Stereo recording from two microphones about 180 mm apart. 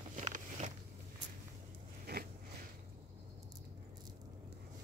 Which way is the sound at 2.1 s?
65° right (ahead or behind).